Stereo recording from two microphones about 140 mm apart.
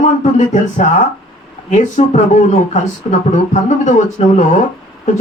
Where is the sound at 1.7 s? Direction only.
55° left (ahead or behind).